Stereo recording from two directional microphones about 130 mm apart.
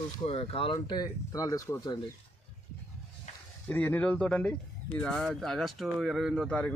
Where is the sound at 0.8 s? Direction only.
30° left (ahead or behind).